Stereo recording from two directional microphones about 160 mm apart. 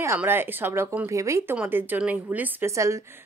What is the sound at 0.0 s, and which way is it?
A woman's voice, 15° right (ahead or behind).